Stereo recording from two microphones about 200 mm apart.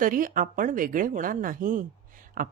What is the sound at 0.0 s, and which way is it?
A woman's voice, 45° right (ahead or behind).